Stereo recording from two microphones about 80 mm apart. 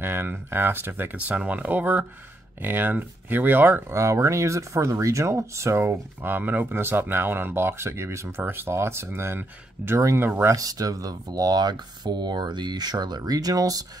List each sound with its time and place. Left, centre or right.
0.0 s speech: right
3.9 s speech: right
10.5 s speech: right